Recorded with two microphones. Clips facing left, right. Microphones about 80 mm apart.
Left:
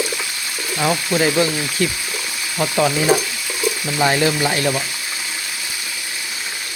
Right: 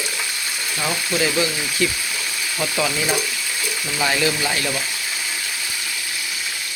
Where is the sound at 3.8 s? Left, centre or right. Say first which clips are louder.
Left 4 dB; centre.